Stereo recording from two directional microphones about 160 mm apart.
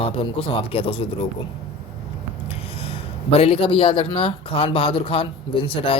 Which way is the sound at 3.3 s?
35° left (ahead or behind).